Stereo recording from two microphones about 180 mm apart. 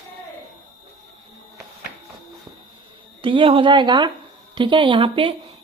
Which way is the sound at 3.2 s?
30° right (ahead or behind).